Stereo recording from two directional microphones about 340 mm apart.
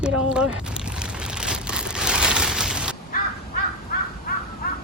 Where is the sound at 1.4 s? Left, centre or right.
Centre.